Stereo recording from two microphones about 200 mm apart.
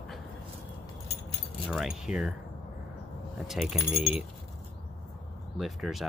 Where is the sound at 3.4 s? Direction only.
5° right (ahead or behind).